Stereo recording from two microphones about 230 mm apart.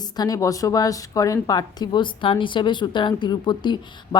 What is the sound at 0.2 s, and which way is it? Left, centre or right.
A woman's voice, centre.